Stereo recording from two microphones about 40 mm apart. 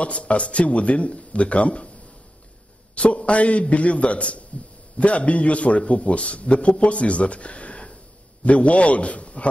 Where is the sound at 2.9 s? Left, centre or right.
Left.